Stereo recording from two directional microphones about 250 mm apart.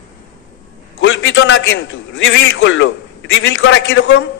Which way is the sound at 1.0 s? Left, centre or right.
Left.